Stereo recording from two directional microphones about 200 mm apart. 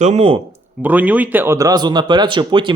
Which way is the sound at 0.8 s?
10° right (ahead or behind).